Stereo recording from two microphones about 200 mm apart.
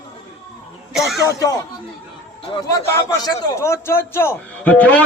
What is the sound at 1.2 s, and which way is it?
Speech, 15° left (ahead or behind).